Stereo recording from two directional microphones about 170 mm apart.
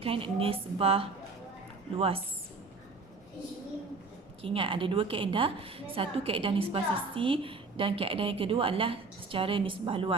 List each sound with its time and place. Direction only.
0.0 s a woman's voice: 35° right (ahead or behind)
4.4 s a woman's voice: 30° right (ahead or behind)